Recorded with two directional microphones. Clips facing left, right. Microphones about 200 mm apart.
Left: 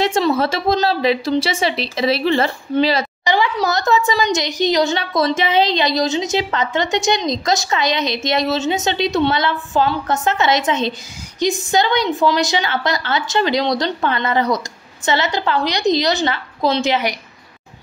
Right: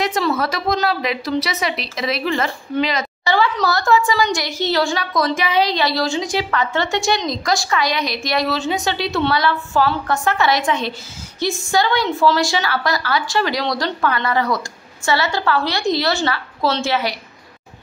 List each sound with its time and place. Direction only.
0.0 s speech: 25° left (ahead or behind)
3.3 s a woman's voice: 15° left (ahead or behind)